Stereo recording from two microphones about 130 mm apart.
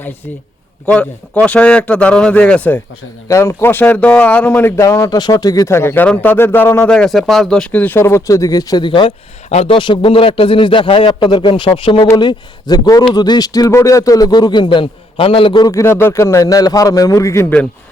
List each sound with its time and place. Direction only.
0.9 s speech: 10° left (ahead or behind); by 9.1 s 40° left (ahead or behind)
9.5 s a man's voice: 55° left (ahead or behind)
9.7 s a man's voice: 40° left (ahead or behind)
15.7 s speech: 20° left (ahead or behind)